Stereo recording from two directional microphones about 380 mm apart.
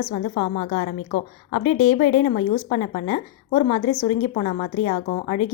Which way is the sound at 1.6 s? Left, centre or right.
Left.